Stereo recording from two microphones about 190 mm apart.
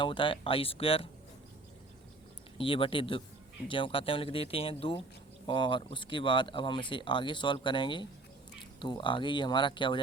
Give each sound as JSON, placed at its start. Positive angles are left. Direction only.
{"t": 0.0, "sound": "speech", "side_deg": 25}
{"t": 2.6, "sound": "speech", "side_deg": 30}